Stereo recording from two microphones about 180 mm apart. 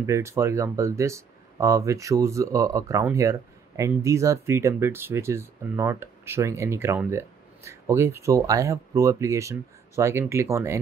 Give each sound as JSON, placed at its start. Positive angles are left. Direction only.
{"t": 0.0, "sound": "speech", "side_deg": -15}